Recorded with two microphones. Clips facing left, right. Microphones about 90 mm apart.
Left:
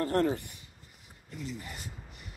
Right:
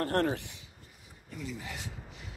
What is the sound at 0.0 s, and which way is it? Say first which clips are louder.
Speech: left 1 dB; 60° right (ahead or behind).